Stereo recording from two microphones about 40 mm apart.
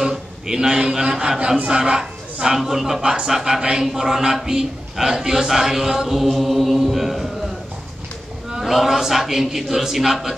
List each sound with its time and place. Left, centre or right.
0.1 s a man's voice: centre
6.8 s chant: centre
8.5 s chant: centre
8.7 s a man's voice: centre